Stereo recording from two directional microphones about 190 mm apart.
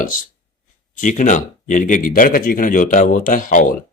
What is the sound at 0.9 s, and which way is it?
A man's voice, 45° left (ahead or behind).